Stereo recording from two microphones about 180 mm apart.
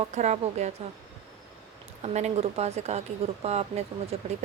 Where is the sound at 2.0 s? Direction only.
40° right (ahead or behind).